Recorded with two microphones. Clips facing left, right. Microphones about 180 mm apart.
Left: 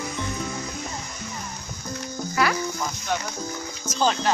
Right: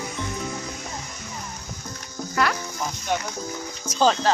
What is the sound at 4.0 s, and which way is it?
Speech, 30° right (ahead or behind).